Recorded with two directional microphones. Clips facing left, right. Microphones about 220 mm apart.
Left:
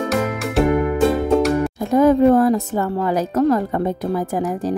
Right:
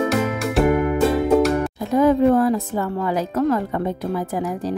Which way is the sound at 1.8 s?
45° left (ahead or behind).